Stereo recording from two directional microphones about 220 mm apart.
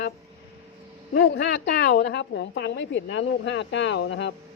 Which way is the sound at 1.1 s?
50° left (ahead or behind).